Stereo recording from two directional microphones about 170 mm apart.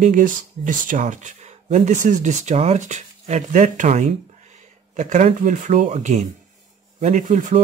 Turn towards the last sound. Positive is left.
turn(degrees=-45)  # may be behind; listen again after turning